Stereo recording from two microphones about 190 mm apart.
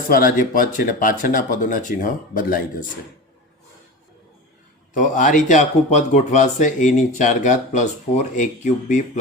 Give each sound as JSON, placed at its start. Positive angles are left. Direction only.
{"t": 0.1, "sound": "speech", "side_deg": 50}
{"t": 4.9, "sound": "speech", "side_deg": 40}